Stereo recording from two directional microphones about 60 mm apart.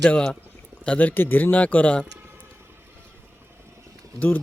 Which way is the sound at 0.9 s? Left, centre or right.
Left.